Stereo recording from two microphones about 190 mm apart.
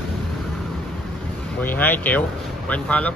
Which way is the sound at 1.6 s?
10° left (ahead or behind).